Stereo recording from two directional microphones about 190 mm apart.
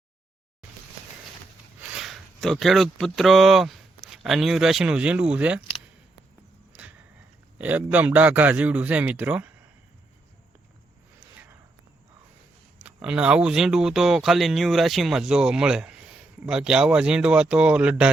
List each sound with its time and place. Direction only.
1.9 s speech: centre (ahead or behind)
7.6 s a man's voice: 10° right (ahead or behind)
12.8 s speech: 5° right (ahead or behind)